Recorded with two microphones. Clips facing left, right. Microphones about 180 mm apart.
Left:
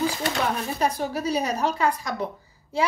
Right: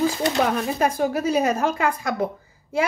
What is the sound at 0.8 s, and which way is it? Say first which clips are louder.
A woman's voice: right 3 dB; 50° right (ahead or behind).